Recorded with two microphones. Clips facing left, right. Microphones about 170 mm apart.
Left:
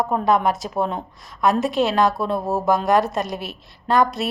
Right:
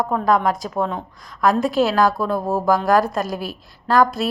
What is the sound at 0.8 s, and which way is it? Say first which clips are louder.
Speech: even; 25° left (ahead or behind).